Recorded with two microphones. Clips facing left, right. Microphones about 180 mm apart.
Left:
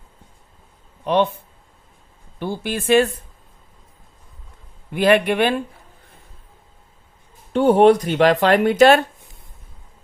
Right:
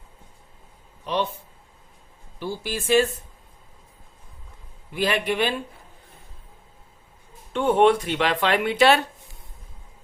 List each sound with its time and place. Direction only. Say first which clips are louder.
1.0 s speech: left 8 dB; 60° left (ahead or behind)
2.4 s speech: left 4 dB; 60° left (ahead or behind)
4.9 s speech: left 7 dB; 60° left (ahead or behind)
7.5 s speech: left 5 dB; 35° left (ahead or behind)